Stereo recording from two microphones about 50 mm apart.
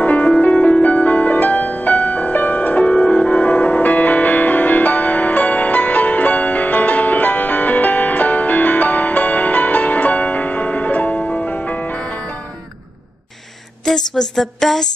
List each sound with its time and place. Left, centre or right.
0.0 s music: left
13.8 s a woman's voice: centre